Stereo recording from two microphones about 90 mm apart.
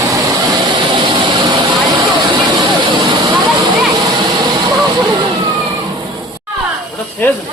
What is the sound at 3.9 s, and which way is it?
Vehicle, 50° right (ahead or behind).